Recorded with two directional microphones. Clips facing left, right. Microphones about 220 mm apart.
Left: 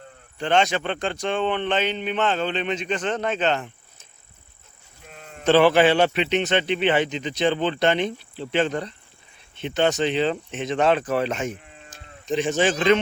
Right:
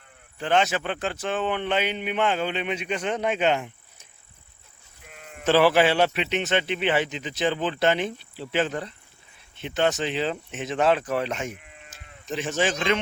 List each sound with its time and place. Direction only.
0.3 s a man's voice: 5° right (ahead or behind)
5.5 s a man's voice: 5° right (ahead or behind)